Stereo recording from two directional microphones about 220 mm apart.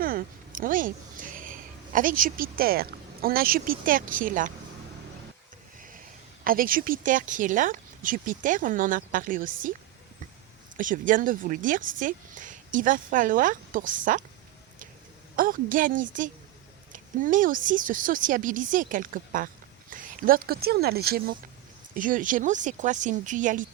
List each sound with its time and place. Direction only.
0.0 s speech: 40° right (ahead or behind)
6.4 s speech: 40° right (ahead or behind)
10.8 s speech: 40° right (ahead or behind)
15.4 s speech: 40° right (ahead or behind)